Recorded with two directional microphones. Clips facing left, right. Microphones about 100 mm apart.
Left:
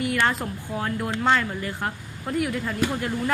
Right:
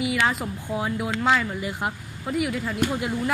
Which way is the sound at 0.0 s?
5° right (ahead or behind).